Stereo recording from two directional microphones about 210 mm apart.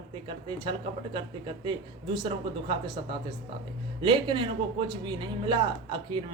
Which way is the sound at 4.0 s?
25° right (ahead or behind).